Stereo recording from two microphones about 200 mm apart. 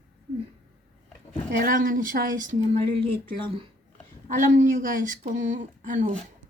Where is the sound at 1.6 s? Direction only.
40° right (ahead or behind).